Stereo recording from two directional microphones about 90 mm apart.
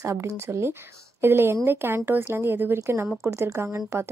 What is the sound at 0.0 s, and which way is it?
A woman's voice, 35° right (ahead or behind).